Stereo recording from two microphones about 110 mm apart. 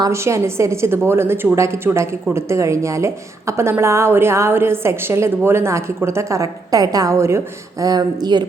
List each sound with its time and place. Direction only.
0.1 s a woman's voice: 25° right (ahead or behind)